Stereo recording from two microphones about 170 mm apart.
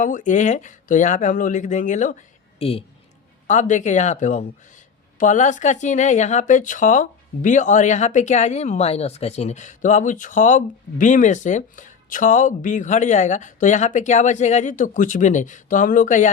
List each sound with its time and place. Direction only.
0.0 s speech: 50° left (ahead or behind)